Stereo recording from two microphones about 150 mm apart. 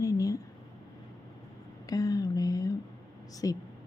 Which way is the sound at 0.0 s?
25° left (ahead or behind).